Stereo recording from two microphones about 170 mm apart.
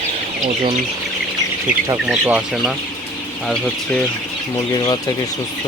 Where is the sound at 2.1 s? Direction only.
5° right (ahead or behind).